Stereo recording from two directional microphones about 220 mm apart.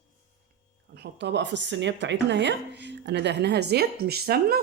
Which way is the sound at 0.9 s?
50° right (ahead or behind).